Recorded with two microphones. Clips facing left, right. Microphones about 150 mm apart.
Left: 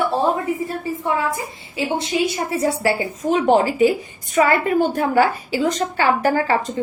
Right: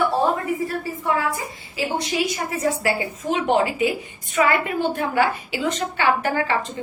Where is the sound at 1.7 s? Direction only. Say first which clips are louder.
Left 3 dB; 25° left (ahead or behind).